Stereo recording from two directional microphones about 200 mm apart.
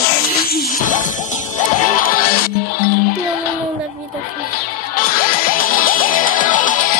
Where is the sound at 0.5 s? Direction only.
45° left (ahead or behind).